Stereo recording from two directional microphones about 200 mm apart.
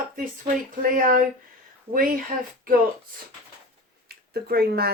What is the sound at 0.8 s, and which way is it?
Speech, 40° right (ahead or behind).